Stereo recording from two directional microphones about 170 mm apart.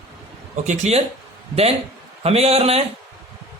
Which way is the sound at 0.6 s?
40° right (ahead or behind).